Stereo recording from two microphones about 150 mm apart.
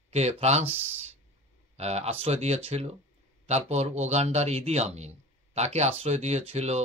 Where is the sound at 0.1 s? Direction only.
45° right (ahead or behind).